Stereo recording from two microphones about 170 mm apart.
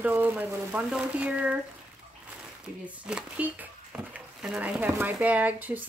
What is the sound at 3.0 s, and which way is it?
Speech, 5° right (ahead or behind).